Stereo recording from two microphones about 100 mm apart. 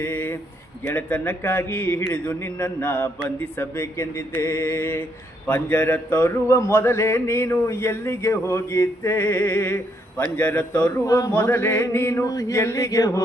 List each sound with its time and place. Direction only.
0.0 s a sound: 20° left (ahead or behind)
0.9 s speech: 15° left (ahead or behind)
11.0 s mantra: 35° left (ahead or behind)